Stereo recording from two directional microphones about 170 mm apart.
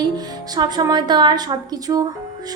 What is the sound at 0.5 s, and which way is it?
A woman's voice, 25° right (ahead or behind).